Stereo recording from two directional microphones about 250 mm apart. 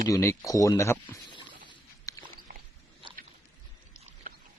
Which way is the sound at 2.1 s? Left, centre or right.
Centre.